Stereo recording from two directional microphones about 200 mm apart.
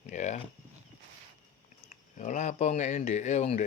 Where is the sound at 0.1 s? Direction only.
35° left (ahead or behind).